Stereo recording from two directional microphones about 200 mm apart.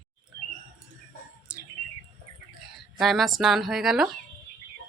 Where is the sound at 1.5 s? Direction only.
5° right (ahead or behind).